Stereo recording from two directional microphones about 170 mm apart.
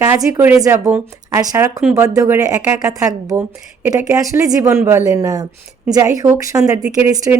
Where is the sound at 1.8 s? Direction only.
5° right (ahead or behind).